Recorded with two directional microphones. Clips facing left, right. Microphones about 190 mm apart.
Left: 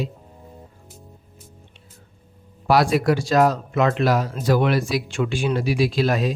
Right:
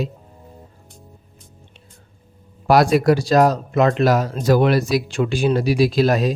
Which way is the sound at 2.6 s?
45° right (ahead or behind).